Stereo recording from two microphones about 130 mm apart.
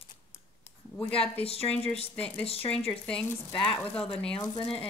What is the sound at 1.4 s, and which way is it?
A woman's voice, 50° left (ahead or behind).